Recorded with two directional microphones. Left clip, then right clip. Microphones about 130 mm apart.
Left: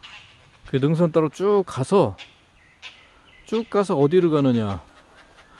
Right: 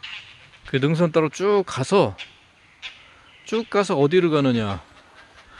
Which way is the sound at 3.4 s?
30° left (ahead or behind).